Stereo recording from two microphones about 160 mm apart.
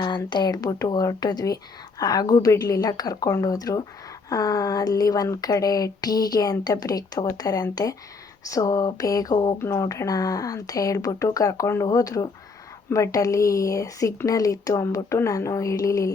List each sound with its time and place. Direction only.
0.0 s a woman's voice: 25° left (ahead or behind)